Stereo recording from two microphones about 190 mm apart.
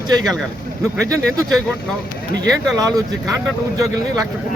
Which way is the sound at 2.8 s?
20° right (ahead or behind).